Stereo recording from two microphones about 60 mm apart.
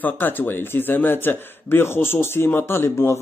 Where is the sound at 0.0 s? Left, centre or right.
Left.